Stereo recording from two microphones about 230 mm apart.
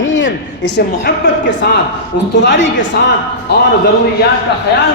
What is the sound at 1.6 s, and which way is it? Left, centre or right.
Speech, left.